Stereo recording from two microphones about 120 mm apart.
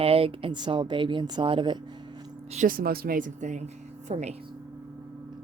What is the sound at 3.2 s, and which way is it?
Speech, 90° right.